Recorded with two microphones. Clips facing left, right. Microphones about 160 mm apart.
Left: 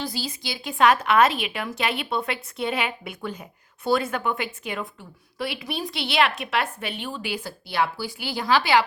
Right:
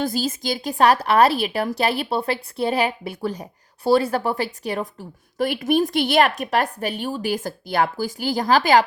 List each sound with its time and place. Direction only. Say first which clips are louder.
0.0 s a woman's voice: right 7 dB; 45° right (ahead or behind)